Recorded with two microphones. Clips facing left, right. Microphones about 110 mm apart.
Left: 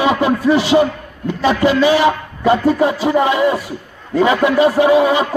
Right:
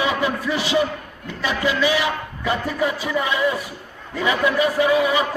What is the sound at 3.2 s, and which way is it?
Speech, 45° left (ahead or behind).